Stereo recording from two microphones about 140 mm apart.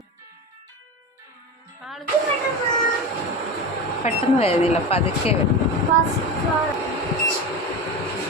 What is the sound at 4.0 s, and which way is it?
Speech, 45° left (ahead or behind).